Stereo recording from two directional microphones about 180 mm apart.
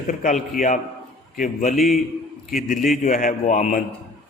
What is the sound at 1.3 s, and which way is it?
A man's voice, 45° left (ahead or behind).